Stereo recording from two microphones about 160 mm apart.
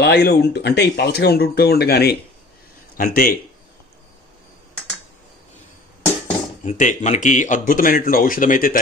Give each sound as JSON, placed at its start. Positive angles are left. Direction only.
{"t": 0.0, "sound": "speech", "side_deg": 90}
{"t": 3.0, "sound": "speech", "side_deg": 65}
{"t": 6.6, "sound": "speech", "side_deg": 50}